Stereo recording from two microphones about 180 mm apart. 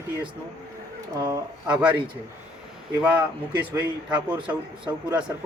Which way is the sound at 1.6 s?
5° right (ahead or behind).